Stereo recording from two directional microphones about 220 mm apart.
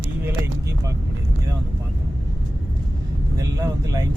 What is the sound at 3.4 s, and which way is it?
Speech, 15° right (ahead or behind).